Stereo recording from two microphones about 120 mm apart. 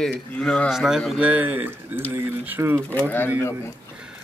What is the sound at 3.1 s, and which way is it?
Speech, 20° left (ahead or behind).